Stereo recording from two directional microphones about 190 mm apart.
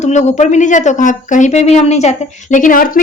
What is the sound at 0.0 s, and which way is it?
Speech, 35° left (ahead or behind).